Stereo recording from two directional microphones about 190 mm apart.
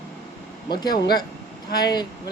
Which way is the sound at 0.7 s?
20° left (ahead or behind).